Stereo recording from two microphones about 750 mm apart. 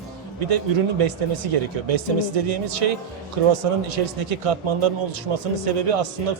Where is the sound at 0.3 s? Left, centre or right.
Right.